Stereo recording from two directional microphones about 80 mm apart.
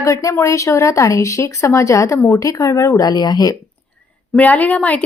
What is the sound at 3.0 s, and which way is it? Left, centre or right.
Speech, left.